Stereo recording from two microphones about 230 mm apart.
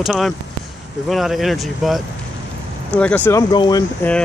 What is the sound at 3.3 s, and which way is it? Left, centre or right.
Speech, centre.